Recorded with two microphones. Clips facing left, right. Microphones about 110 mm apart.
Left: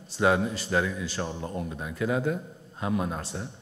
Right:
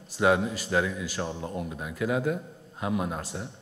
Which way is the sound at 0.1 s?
5° right (ahead or behind).